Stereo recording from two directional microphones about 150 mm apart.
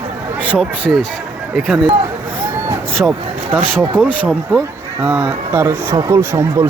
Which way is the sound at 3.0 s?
10° right (ahead or behind).